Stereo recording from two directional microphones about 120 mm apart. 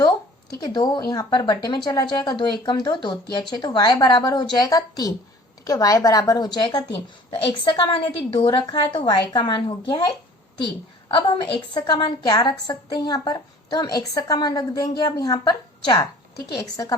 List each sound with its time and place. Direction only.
0.6 s a woman's voice: 35° left (ahead or behind)
11.1 s a woman's voice: 40° left (ahead or behind)